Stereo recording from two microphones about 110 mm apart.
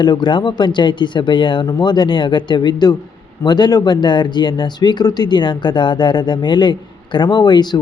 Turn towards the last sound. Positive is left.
turn(degrees=40)  # may be behind; listen again after turning